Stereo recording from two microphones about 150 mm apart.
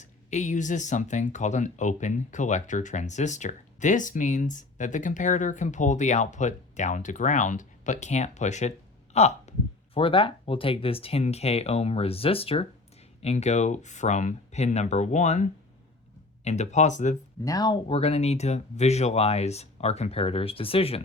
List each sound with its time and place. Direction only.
0.0 s speech: 50° left (ahead or behind)
17.4 s speech: 25° left (ahead or behind)
17.8 s speech: 45° left (ahead or behind)